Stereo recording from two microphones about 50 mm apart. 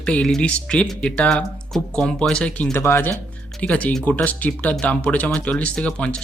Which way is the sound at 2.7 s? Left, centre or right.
Left.